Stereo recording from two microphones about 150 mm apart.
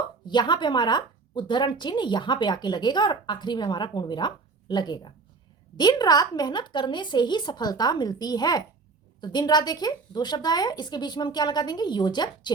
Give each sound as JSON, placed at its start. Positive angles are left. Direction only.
{"t": 0.3, "sound": "speech", "side_deg": 30}